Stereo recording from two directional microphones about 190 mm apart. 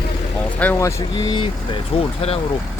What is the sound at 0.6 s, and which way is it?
Speech, 10° left (ahead or behind).